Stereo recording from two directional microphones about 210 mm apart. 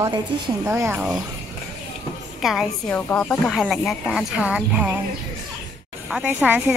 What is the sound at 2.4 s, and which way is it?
A woman's voice, centre (ahead or behind).